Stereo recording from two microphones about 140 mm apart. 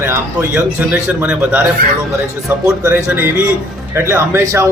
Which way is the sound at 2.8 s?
15° right (ahead or behind).